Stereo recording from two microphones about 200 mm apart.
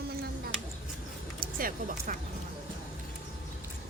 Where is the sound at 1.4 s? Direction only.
45° right (ahead or behind).